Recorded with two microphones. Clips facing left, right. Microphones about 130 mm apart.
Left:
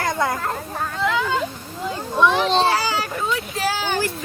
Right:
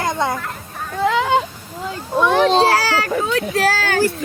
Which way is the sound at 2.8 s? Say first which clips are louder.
Right 5 dB; 90° right.